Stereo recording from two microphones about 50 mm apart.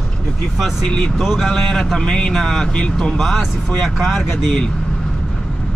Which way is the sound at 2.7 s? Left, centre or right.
Centre.